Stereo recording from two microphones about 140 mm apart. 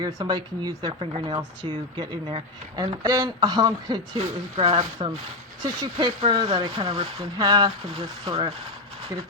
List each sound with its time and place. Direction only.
0.0 s speech: 30° right (ahead or behind)
0.9 s speech: 40° right (ahead or behind)